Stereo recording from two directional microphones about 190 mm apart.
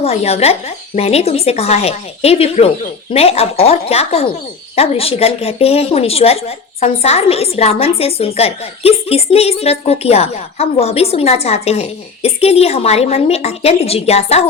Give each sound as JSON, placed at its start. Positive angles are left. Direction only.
{"t": 0.0, "sound": "a woman's voice", "side_deg": 35}